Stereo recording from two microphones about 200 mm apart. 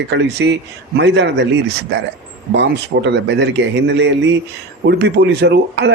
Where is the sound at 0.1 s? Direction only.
60° right (ahead or behind).